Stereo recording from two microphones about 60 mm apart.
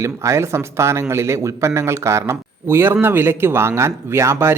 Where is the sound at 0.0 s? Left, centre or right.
Right.